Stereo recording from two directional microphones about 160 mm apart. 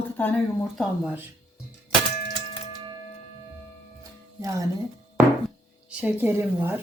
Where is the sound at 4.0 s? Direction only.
20° right (ahead or behind).